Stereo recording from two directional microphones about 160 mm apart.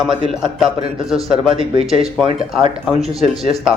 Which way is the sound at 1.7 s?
35° right (ahead or behind).